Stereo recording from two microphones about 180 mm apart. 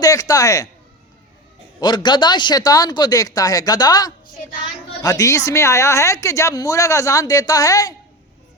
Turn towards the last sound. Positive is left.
turn(degrees=20)  # may be behind; listen again after turning